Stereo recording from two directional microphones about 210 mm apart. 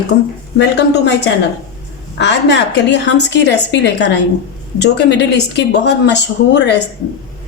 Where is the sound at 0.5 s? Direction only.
55° left (ahead or behind).